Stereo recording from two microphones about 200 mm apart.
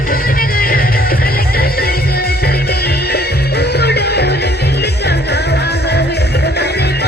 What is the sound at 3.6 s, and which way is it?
Music, 55° left (ahead or behind).